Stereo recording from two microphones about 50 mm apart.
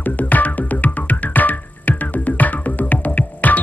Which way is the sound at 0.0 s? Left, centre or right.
Left.